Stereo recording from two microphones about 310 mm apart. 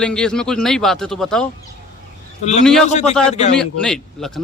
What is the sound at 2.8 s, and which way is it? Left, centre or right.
Speech, left.